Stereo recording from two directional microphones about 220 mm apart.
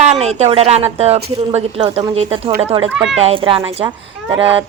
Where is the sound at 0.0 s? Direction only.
30° right (ahead or behind).